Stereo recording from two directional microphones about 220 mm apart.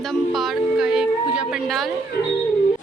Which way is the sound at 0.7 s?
5° right (ahead or behind).